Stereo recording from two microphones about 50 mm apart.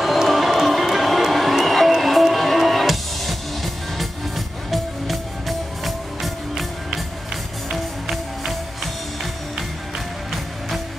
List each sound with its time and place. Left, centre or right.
0.0 s music: centre
9.2 s music: centre